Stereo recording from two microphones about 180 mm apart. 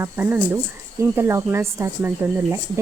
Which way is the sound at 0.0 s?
10° right (ahead or behind).